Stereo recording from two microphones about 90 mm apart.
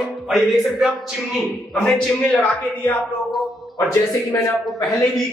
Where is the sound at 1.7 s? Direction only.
5° left (ahead or behind).